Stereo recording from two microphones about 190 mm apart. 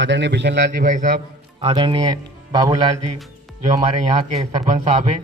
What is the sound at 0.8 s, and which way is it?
Speech, 45° right (ahead or behind).